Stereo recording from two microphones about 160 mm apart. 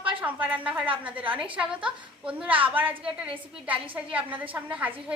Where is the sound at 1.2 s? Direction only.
35° right (ahead or behind).